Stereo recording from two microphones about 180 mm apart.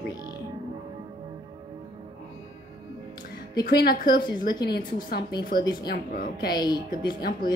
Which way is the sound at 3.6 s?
55° left (ahead or behind).